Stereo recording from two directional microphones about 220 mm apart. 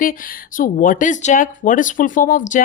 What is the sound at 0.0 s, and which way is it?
Speech, 40° left (ahead or behind).